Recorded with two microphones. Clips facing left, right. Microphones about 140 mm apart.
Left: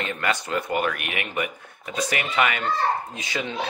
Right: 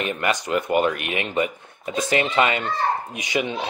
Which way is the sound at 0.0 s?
20° right (ahead or behind).